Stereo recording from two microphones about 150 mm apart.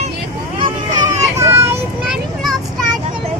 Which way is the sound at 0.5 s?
35° right (ahead or behind).